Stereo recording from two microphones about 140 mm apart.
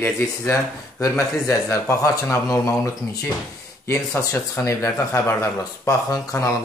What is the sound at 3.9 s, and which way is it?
Speech, 20° left (ahead or behind).